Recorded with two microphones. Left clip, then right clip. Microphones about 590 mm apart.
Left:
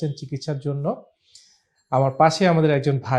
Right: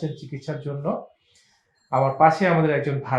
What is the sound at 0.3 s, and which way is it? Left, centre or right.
Speech, left.